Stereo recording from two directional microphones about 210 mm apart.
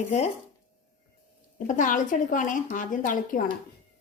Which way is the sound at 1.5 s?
40° left (ahead or behind).